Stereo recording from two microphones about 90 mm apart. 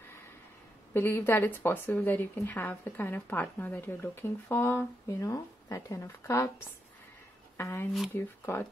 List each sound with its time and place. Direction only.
0.9 s speech: 25° left (ahead or behind)
7.5 s speech: 25° left (ahead or behind)